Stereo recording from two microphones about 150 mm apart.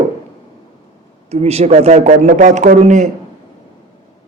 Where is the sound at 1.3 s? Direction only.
45° right (ahead or behind).